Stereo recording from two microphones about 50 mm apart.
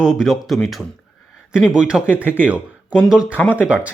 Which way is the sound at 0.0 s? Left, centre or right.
Centre.